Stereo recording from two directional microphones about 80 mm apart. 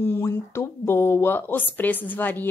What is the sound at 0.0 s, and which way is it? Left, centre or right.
Speech, left.